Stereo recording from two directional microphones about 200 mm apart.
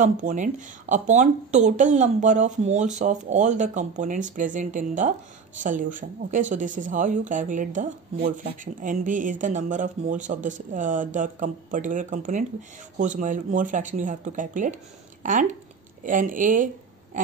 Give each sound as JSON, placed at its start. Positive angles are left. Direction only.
{"t": 0.0, "sound": "a woman's voice", "side_deg": -40}